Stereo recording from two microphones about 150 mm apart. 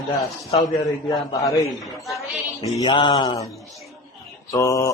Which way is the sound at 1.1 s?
20° left (ahead or behind).